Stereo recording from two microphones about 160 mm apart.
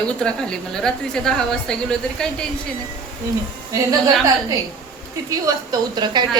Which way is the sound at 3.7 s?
25° right (ahead or behind).